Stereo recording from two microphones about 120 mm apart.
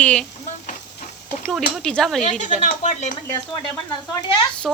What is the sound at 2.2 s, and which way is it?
Speech, 80° left.